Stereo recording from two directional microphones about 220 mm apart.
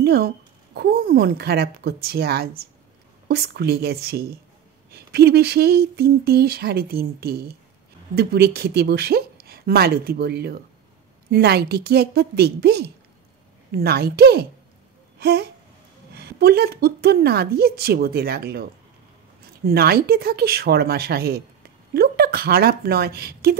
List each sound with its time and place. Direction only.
0.0 s speech: 45° right (ahead or behind)
0.7 s a sound: 45° right (ahead or behind)
21.9 s speech: 45° right (ahead or behind)